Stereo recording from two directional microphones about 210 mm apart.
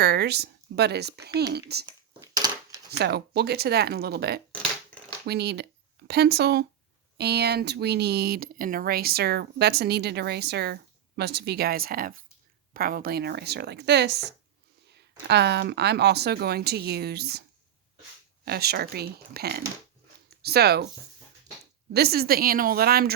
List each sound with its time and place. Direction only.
0.0 s speech: 50° right (ahead or behind)
2.2 s a sound: 20° right (ahead or behind)
3.0 s speech: 50° right (ahead or behind)
18.4 s speech: 50° right (ahead or behind)
21.9 s speech: 50° right (ahead or behind)